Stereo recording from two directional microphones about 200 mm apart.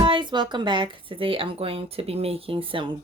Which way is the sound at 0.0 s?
25° right (ahead or behind).